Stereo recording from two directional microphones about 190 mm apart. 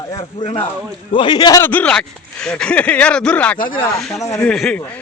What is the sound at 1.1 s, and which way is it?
Speech, 25° left (ahead or behind).